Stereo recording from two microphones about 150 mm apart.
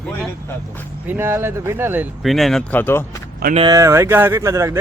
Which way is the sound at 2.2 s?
Centre (ahead or behind).